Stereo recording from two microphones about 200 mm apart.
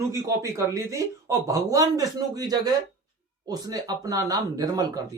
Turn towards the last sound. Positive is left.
turn(degrees=-20)  # may be behind; listen again after turning